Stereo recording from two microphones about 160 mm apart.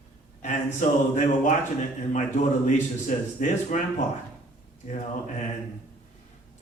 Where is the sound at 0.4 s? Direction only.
50° left (ahead or behind).